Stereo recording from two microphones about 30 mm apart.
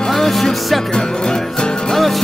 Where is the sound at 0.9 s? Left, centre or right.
Left.